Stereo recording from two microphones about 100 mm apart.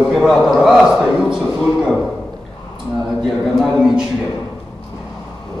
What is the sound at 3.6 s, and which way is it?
Speech, 5° right (ahead or behind).